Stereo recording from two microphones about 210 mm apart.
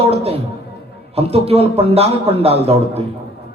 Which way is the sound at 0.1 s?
30° right (ahead or behind).